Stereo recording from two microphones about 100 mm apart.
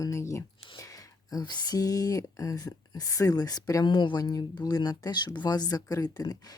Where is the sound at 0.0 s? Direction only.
30° left (ahead or behind).